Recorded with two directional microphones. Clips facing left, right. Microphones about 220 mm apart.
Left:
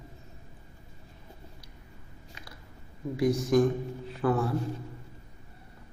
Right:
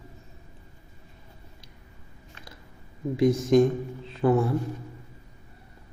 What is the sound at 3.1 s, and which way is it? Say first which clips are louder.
A man's voice: right 4 dB; 25° right (ahead or behind).